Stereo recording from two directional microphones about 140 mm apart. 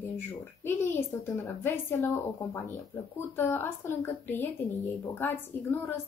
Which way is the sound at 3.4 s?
15° left (ahead or behind).